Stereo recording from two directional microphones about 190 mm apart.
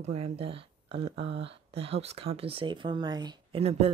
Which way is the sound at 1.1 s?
70° right (ahead or behind).